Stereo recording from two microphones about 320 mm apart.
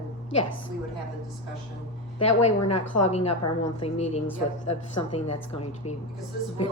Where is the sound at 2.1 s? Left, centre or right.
Centre.